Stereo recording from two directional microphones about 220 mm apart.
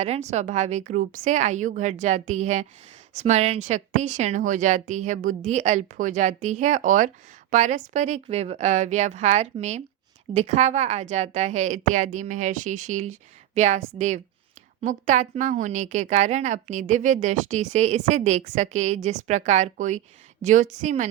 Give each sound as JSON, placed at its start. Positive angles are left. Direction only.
{"t": 0.0, "sound": "a woman's voice", "side_deg": -30}
{"t": 14.8, "sound": "a woman's voice", "side_deg": -35}